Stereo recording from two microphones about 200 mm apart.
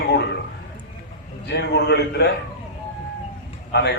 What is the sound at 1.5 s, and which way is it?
Speech, 55° left (ahead or behind).